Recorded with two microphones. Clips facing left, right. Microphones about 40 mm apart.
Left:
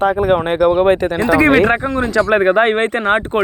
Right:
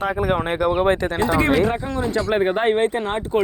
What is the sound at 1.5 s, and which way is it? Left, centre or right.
Speech, left.